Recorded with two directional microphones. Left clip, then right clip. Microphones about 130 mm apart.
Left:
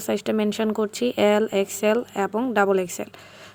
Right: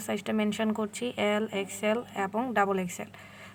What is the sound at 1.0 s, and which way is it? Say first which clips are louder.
Speech: left 10 dB; 45° left (ahead or behind).